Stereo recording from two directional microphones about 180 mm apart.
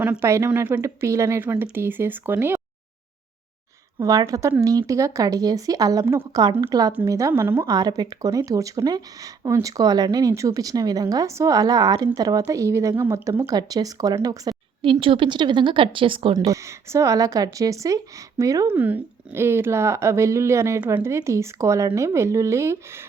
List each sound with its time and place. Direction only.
0.0 s speech: 10° right (ahead or behind)
4.0 s a woman's voice: 20° right (ahead or behind)
16.5 s speech: 15° right (ahead or behind)